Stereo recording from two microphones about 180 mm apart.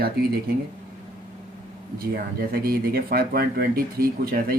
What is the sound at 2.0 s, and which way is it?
Speech, 55° right (ahead or behind).